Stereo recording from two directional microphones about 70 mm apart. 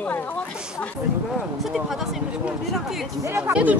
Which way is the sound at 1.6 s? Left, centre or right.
Centre.